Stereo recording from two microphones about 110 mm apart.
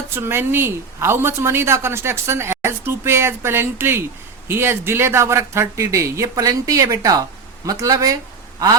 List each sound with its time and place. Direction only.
0.1 s a woman's voice: 20° right (ahead or behind)